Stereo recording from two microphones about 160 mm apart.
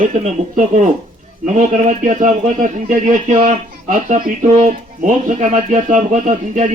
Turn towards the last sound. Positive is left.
turn(degrees=-50)  # may be behind; listen again after turning